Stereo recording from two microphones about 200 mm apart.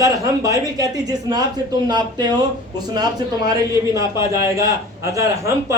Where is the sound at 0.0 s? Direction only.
15° right (ahead or behind).